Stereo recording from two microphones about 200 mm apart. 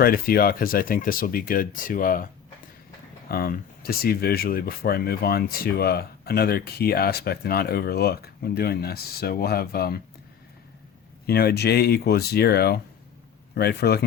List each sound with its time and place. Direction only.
0.0 s speech: 45° left (ahead or behind)
3.2 s speech: 50° left (ahead or behind)
11.3 s speech: 50° left (ahead or behind)